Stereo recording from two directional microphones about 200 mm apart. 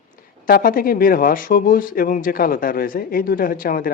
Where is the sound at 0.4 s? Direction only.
45° left (ahead or behind).